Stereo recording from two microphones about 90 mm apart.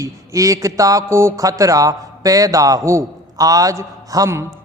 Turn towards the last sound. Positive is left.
turn(degrees=-35)  # may be behind; listen again after turning